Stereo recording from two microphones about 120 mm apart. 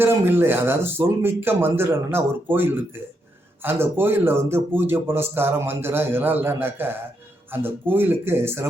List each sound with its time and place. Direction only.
0.0 s speech: 20° right (ahead or behind)